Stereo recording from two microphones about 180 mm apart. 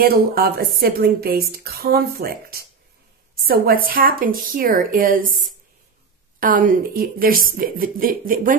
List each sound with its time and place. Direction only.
0.0 s a woman's voice: 55° right (ahead or behind)
6.4 s a woman's voice: 50° right (ahead or behind)